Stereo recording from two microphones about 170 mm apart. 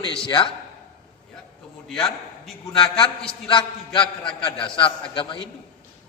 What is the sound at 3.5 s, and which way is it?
A man's voice, 30° left (ahead or behind).